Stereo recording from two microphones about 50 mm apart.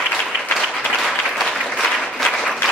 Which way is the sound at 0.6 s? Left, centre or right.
Centre.